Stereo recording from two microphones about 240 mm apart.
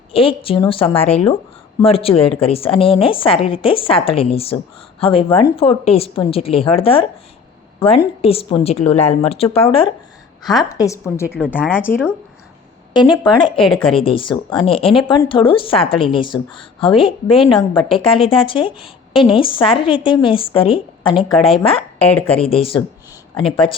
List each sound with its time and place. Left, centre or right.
0.1 s a woman's voice: left
12.9 s a woman's voice: centre
21.9 s speech: centre
22.4 s a woman's voice: left